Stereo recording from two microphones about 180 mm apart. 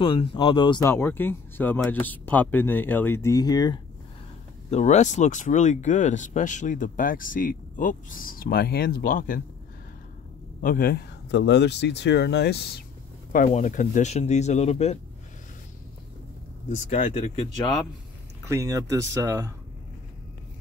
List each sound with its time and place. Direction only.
0.0 s speech: 30° left (ahead or behind)
0.8 s speech: 15° left (ahead or behind)
4.6 s speech: 40° left (ahead or behind)
10.6 s speech: 50° left (ahead or behind)
13.5 s speech: 45° left (ahead or behind)
16.6 s speech: 40° left (ahead or behind)
18.4 s speech: 15° right (ahead or behind)